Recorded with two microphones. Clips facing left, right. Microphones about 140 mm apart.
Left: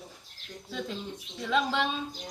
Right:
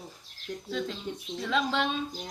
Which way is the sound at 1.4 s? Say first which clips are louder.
Left 1 dB; 5° left (ahead or behind).